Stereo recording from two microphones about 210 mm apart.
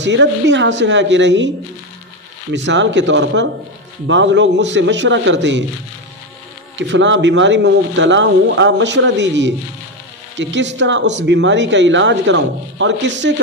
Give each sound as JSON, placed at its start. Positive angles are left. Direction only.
{"t": 0.0, "sound": "speech", "side_deg": -60}
{"t": 2.5, "sound": "speech", "side_deg": -55}
{"t": 6.8, "sound": "speech", "side_deg": -60}